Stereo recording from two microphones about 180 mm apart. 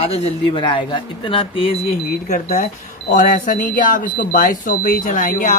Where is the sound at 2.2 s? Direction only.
45° left (ahead or behind).